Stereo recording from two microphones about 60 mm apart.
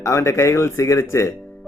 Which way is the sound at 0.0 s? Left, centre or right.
Left.